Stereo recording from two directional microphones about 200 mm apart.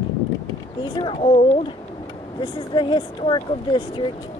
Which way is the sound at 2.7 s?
25° left (ahead or behind).